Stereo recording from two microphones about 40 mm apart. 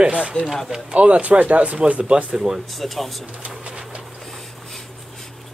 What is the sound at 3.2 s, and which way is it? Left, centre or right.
Speech, right.